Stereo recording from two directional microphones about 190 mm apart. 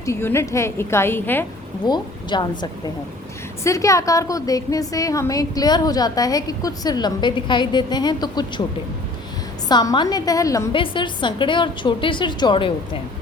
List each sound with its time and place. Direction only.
0.0 s a woman's voice: 15° left (ahead or behind)
1.8 s a woman's voice: 20° left (ahead or behind)
9.6 s a woman's voice: 20° left (ahead or behind)